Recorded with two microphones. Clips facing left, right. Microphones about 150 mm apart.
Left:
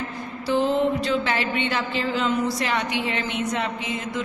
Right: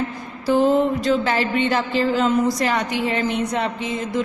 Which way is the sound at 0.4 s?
45° right (ahead or behind).